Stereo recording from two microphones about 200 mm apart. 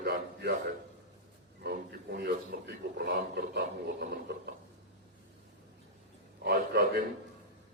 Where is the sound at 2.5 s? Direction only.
50° right (ahead or behind).